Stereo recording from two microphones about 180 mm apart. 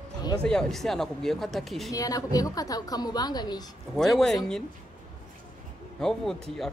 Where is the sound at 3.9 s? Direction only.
Centre (ahead or behind).